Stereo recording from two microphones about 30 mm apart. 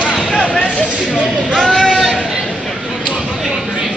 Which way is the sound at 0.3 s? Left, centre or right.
Left.